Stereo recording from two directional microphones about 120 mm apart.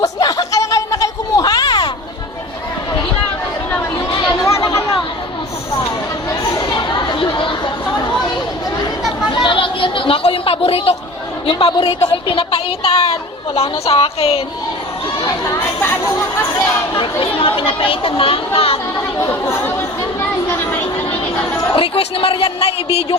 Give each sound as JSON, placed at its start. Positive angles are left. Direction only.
{"t": 0.0, "sound": "a sound", "side_deg": 30}
{"t": 6.7, "sound": "chatter", "side_deg": 40}
{"t": 9.3, "sound": "chatter", "side_deg": 40}
{"t": 11.4, "sound": "a woman's voice", "side_deg": 50}
{"t": 15.4, "sound": "speech", "side_deg": 25}
{"t": 17.0, "sound": "speech", "side_deg": 50}
{"t": 19.2, "sound": "speech", "side_deg": 20}
{"t": 21.8, "sound": "speech", "side_deg": 50}